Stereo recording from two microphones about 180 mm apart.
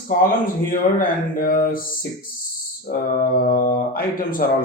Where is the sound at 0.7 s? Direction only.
50° left (ahead or behind).